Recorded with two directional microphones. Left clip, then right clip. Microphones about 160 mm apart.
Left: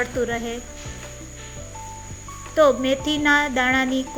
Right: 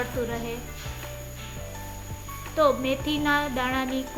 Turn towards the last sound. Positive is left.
turn(degrees=35)  # may be behind; listen again after turning